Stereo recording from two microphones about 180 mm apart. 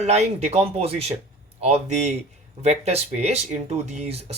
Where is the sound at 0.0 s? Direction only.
35° right (ahead or behind).